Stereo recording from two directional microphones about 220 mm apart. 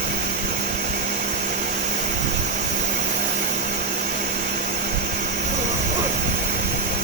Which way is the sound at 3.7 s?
45° right (ahead or behind).